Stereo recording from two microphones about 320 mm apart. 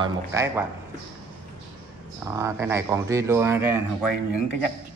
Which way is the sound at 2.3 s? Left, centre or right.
Centre.